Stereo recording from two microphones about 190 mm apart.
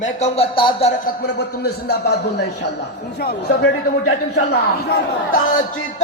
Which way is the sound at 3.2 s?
55° left (ahead or behind).